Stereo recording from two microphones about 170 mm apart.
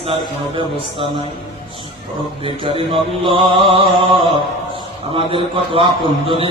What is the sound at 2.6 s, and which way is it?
A man's voice, 30° right (ahead or behind).